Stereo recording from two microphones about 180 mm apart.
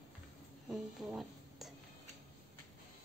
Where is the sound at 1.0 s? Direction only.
Centre (ahead or behind).